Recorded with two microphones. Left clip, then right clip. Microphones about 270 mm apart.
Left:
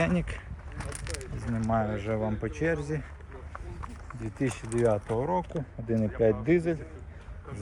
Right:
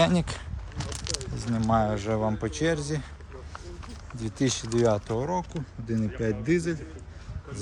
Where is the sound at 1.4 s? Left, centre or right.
Centre.